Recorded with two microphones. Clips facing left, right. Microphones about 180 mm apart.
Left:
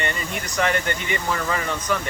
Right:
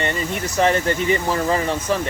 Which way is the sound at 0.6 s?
30° right (ahead or behind).